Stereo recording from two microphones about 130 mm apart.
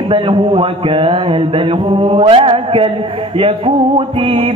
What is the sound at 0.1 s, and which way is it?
Music, 45° right (ahead or behind).